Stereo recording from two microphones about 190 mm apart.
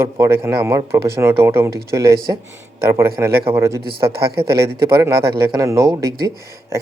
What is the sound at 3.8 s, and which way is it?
Speech, 55° right (ahead or behind).